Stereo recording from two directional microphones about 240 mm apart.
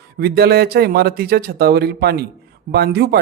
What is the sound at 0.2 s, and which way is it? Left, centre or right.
A woman's voice, right.